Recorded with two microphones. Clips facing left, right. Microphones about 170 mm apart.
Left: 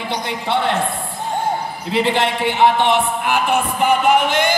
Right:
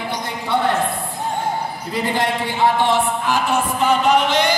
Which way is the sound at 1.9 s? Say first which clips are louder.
Left 4 dB; 75° left (ahead or behind).